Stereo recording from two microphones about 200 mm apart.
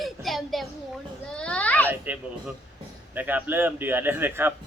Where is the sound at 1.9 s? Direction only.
10° right (ahead or behind).